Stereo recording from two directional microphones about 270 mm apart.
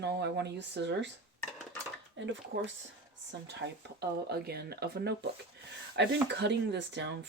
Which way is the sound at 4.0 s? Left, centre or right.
Right.